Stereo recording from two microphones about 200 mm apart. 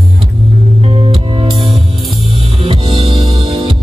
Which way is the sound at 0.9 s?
25° right (ahead or behind).